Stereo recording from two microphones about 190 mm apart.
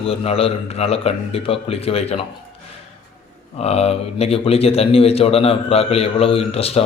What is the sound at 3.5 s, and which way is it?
A man's voice, 35° left (ahead or behind).